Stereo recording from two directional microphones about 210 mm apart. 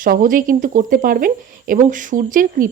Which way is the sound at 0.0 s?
40° right (ahead or behind).